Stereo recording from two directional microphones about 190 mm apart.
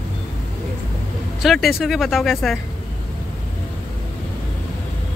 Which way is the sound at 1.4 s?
Centre (ahead or behind).